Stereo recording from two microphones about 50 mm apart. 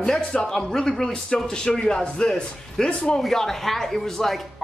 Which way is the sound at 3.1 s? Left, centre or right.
Centre.